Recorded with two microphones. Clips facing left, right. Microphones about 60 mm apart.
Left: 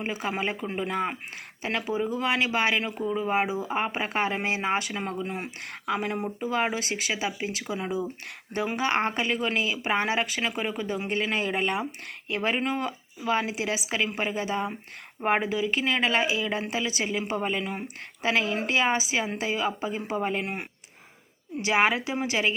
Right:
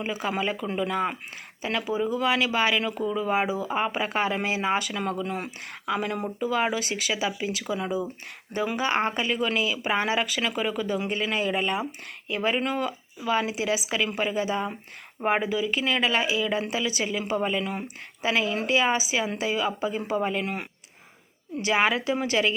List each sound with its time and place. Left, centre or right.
0.0 s speech: left
8.5 s speech: left
21.7 s speech: left